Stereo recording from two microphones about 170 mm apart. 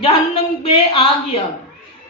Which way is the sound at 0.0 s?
30° left (ahead or behind).